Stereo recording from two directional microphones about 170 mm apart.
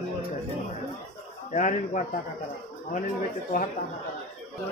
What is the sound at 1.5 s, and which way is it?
Speech, 45° left (ahead or behind).